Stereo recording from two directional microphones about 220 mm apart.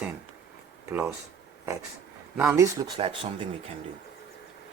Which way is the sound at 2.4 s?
10° right (ahead or behind).